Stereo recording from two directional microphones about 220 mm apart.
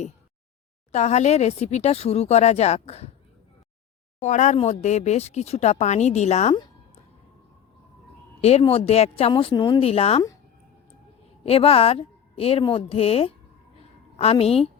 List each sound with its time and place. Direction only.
0.9 s speech: 30° left (ahead or behind)
4.2 s speech: 35° left (ahead or behind)
8.4 s speech: 30° left (ahead or behind)
11.4 s speech: 25° left (ahead or behind)